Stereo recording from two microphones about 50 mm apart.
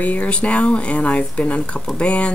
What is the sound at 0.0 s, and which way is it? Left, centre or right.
A woman's voice, left.